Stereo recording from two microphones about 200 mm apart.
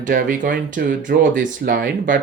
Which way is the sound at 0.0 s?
45° right (ahead or behind).